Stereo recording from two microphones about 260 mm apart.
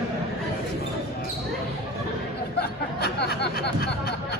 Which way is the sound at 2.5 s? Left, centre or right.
Left.